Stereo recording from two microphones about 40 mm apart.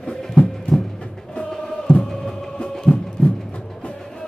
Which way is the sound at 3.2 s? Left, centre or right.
Left.